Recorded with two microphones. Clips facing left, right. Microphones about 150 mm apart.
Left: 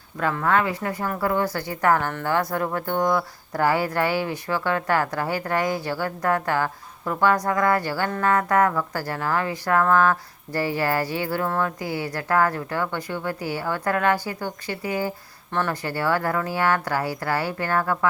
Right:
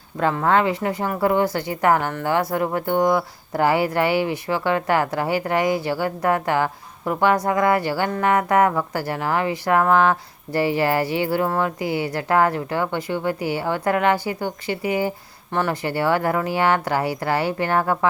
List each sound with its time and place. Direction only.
0.2 s speech: 25° right (ahead or behind)